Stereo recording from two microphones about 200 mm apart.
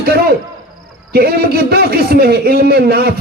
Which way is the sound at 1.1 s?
50° right (ahead or behind).